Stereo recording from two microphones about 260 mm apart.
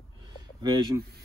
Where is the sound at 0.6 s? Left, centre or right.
Centre.